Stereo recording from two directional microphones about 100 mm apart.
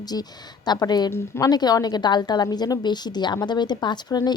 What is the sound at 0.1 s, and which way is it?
A woman's voice, 40° left (ahead or behind).